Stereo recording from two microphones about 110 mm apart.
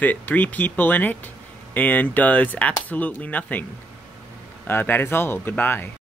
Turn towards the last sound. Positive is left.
turn(degrees=20)  # may be behind; listen again after turning